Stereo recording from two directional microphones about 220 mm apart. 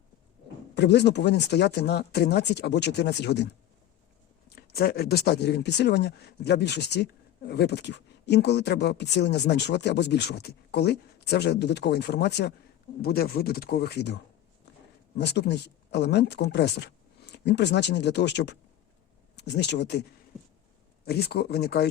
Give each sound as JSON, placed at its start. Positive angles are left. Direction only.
{"t": 0.8, "sound": "speech", "side_deg": 50}
{"t": 15.2, "sound": "speech", "side_deg": 50}
{"t": 21.0, "sound": "speech", "side_deg": 45}